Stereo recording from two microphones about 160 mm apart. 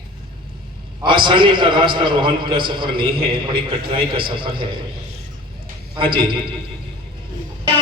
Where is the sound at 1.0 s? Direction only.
30° right (ahead or behind).